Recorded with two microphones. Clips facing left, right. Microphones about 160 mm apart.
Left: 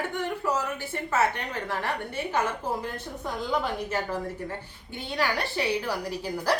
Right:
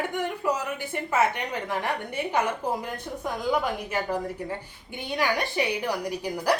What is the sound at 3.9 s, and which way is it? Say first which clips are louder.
Speech: right 2 dB; 15° right (ahead or behind).